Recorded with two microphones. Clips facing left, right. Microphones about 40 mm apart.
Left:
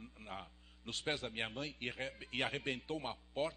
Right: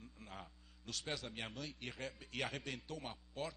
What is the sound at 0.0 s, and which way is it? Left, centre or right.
A man's voice, left.